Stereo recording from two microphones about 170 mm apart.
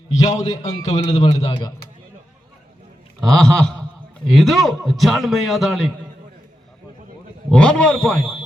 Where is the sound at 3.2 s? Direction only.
5° left (ahead or behind).